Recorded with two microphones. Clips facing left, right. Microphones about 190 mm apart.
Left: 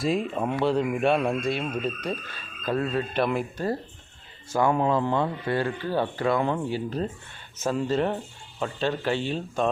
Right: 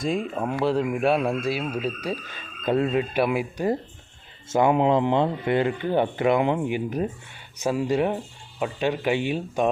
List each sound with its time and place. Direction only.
0.0 s speech: centre (ahead or behind)